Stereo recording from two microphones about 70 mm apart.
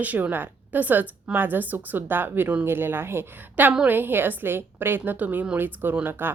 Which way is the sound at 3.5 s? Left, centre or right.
Right.